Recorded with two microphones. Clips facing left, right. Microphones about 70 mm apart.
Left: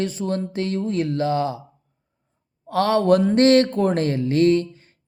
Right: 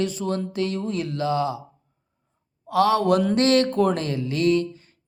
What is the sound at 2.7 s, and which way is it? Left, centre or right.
Speech, left.